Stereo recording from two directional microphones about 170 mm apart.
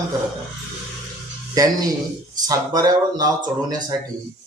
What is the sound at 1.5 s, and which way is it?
Speech, 20° right (ahead or behind).